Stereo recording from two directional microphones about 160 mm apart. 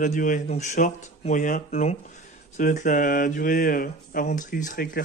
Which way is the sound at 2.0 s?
60° left (ahead or behind).